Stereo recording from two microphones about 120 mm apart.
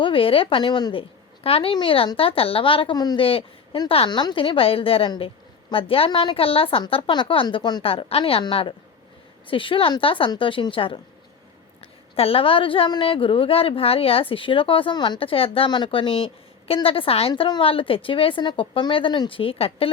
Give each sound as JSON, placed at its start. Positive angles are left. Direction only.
{"t": 0.0, "sound": "a woman's voice", "side_deg": 50}
{"t": 1.5, "sound": "a woman's voice", "side_deg": 55}
{"t": 3.2, "sound": "a woman's voice", "side_deg": 50}
{"t": 12.1, "sound": "a woman's voice", "side_deg": 55}